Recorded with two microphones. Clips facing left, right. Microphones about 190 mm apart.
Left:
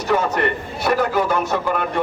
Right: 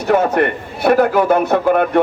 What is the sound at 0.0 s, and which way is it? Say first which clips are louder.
A man's voice: right 5 dB; 55° right (ahead or behind).